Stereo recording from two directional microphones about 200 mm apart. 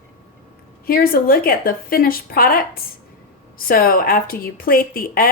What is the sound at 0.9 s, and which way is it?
Speech, 45° left (ahead or behind).